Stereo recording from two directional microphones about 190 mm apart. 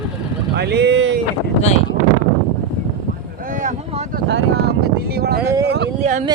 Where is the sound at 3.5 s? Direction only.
45° right (ahead or behind).